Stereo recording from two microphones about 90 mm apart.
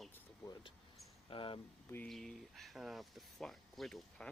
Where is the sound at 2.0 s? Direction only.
5° left (ahead or behind).